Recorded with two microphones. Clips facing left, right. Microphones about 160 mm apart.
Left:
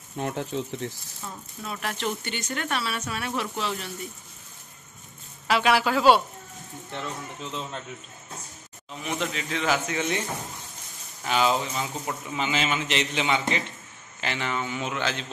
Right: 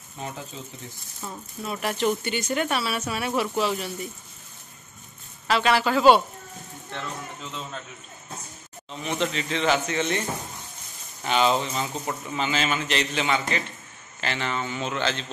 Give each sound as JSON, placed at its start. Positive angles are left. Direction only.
{"t": 0.2, "sound": "speech", "side_deg": 65}
{"t": 1.2, "sound": "speech", "side_deg": -10}
{"t": 5.5, "sound": "a man's voice", "side_deg": 10}
{"t": 9.0, "sound": "a man's voice", "side_deg": 5}
{"t": 11.2, "sound": "a man's voice", "side_deg": 5}